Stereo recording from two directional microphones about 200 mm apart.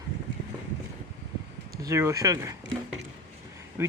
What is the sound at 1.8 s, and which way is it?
Speech, 15° right (ahead or behind).